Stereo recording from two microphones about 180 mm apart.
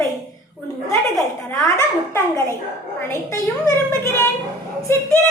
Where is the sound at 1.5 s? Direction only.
15° left (ahead or behind).